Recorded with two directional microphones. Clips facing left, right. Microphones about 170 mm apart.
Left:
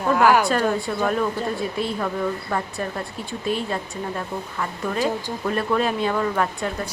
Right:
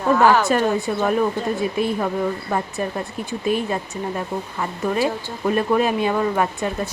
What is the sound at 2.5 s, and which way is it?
Speech, 20° right (ahead or behind).